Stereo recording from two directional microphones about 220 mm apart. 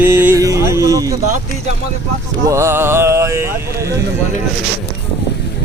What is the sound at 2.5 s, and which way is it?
Speech, 10° right (ahead or behind).